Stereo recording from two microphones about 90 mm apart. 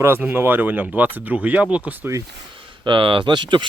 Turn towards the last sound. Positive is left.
turn(degrees=-60)  # may be behind; listen again after turning